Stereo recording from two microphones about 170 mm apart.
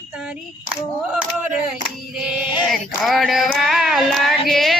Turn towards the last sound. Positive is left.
turn(degrees=0)  # may be behind; listen again after turning